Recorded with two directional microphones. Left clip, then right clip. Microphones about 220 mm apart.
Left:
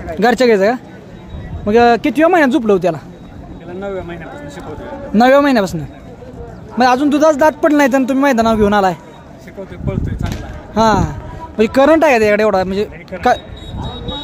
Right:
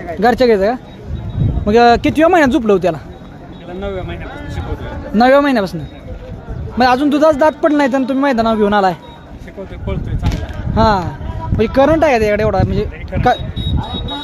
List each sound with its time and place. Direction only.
0.2 s speech: 10° left (ahead or behind)
6.8 s speech: 5° left (ahead or behind)
10.7 s speech: 10° left (ahead or behind)
13.1 s speech: 5° left (ahead or behind)
13.7 s a sound: 20° right (ahead or behind)